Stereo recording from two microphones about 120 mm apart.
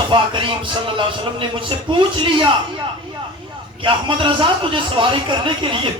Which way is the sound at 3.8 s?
45° right (ahead or behind).